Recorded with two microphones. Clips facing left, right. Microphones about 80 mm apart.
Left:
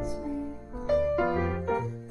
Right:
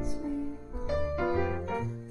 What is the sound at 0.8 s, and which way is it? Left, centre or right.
Music, left.